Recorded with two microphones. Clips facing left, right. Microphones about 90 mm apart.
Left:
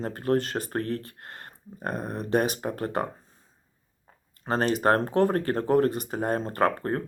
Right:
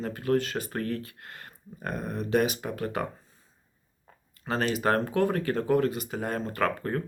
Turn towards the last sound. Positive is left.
turn(degrees=40)  # may be behind; listen again after turning